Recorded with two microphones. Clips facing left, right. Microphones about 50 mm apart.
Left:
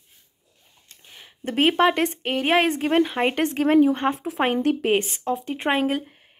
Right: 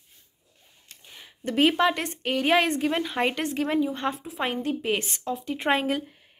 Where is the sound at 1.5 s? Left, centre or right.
Left.